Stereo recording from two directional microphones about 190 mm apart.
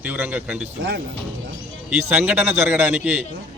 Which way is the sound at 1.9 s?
10° right (ahead or behind).